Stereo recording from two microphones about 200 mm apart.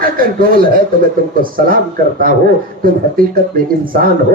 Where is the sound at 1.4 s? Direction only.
45° right (ahead or behind).